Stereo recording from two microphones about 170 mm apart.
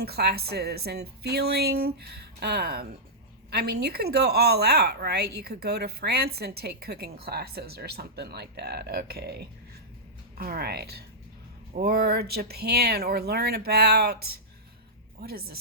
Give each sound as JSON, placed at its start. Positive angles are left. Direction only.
{"t": 0.0, "sound": "speech", "side_deg": -70}
{"t": 15.2, "sound": "speech", "side_deg": -65}